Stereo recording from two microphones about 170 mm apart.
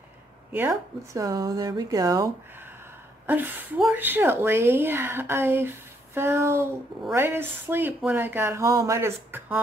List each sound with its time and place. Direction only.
0.5 s speech: 15° right (ahead or behind)
3.3 s speech: 10° right (ahead or behind)